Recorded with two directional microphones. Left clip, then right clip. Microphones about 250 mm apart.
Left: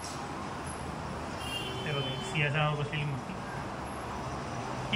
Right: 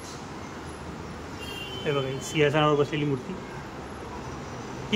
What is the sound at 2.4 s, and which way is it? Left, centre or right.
Speech, right.